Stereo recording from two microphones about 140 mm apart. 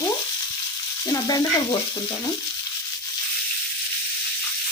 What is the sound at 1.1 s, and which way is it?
Frying, 25° left (ahead or behind).